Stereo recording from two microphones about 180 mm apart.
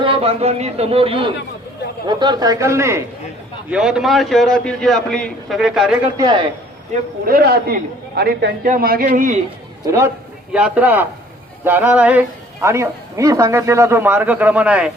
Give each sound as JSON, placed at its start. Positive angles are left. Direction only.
{"t": 0.0, "sound": "a man's voice", "side_deg": -30}
{"t": 3.7, "sound": "a man's voice", "side_deg": -5}
{"t": 6.1, "sound": "a man's voice", "side_deg": -25}
{"t": 7.3, "sound": "a man's voice", "side_deg": -60}
{"t": 8.6, "sound": "a man's voice", "side_deg": -50}
{"t": 9.8, "sound": "speech", "side_deg": -15}